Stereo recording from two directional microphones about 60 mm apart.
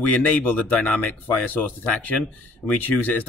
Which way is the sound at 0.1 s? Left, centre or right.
Left.